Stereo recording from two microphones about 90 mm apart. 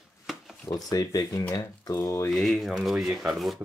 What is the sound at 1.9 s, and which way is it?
Speech, 30° left (ahead or behind).